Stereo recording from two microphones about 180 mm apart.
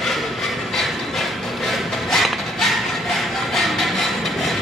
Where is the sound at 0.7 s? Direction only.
Centre (ahead or behind).